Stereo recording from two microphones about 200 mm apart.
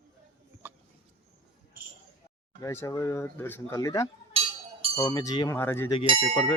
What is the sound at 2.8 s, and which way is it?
Speech, 15° left (ahead or behind).